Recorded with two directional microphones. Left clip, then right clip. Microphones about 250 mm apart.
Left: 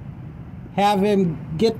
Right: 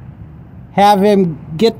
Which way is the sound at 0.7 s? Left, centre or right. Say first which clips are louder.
Right 9 dB; right.